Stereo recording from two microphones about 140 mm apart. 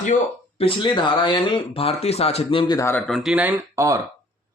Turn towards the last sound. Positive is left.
turn(degrees=-25)  # may be behind; listen again after turning